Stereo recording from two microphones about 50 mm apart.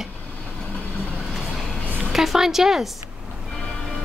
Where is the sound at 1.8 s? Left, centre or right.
Right.